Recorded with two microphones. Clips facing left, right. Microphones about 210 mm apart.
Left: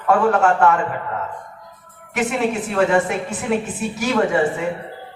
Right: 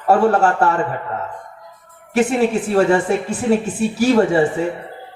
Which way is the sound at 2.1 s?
30° right (ahead or behind).